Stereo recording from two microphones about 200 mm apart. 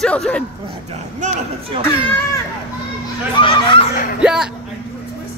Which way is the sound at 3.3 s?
25° left (ahead or behind).